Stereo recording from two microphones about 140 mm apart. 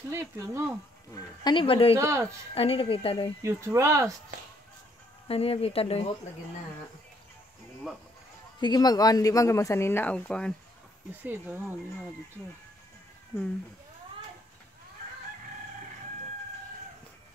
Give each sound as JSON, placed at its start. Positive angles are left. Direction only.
{"t": 0.1, "sound": "speech", "side_deg": -20}
{"t": 1.1, "sound": "speech", "side_deg": 30}
{"t": 2.0, "sound": "speech", "side_deg": -20}
{"t": 2.5, "sound": "speech", "side_deg": 45}
{"t": 3.4, "sound": "speech", "side_deg": -20}
{"t": 5.3, "sound": "speech", "side_deg": 45}
{"t": 8.5, "sound": "speech", "side_deg": 30}
{"t": 11.1, "sound": "speech", "side_deg": -15}